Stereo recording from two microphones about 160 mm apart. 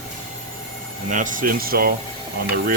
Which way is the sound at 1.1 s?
55° right (ahead or behind).